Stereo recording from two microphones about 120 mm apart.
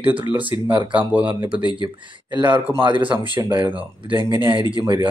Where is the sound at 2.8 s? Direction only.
40° right (ahead or behind).